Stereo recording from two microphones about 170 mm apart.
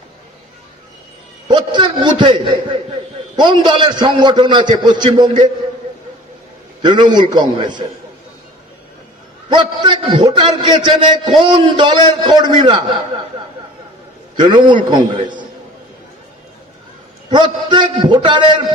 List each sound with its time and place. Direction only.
1.5 s a man's voice: 25° right (ahead or behind)
6.8 s a man's voice: 25° right (ahead or behind)
9.5 s a man's voice: 30° right (ahead or behind)
14.3 s a man's voice: 30° right (ahead or behind)
17.3 s a man's voice: 30° right (ahead or behind)